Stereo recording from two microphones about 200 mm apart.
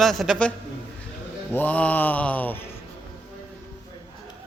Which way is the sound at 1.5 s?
5° left (ahead or behind).